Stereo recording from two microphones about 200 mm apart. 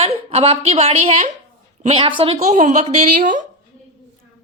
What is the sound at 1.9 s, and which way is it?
A woman's voice, 25° right (ahead or behind).